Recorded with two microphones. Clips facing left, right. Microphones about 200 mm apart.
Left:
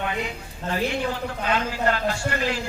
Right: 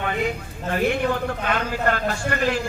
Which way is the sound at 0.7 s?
55° right (ahead or behind).